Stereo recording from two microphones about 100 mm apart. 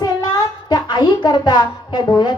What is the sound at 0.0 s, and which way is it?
A child's voice, 40° left (ahead or behind).